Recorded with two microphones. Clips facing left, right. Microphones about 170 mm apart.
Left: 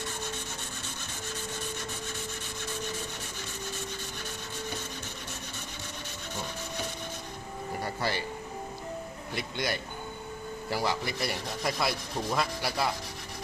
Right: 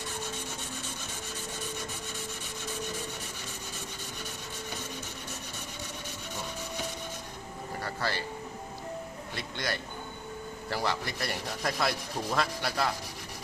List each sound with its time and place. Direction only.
7.8 s music: 15° left (ahead or behind)
9.3 s speech: 15° left (ahead or behind)